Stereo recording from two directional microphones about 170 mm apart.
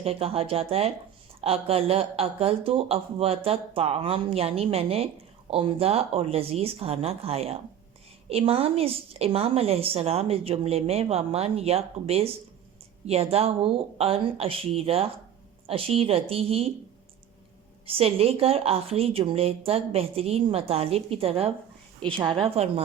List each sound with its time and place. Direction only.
0.0 s a woman's voice: 35° right (ahead or behind)
17.8 s a woman's voice: 35° right (ahead or behind)